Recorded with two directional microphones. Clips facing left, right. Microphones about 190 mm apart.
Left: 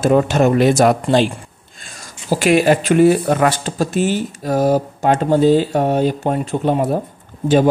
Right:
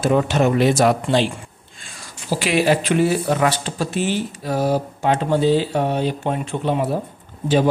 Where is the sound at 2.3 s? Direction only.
45° left (ahead or behind).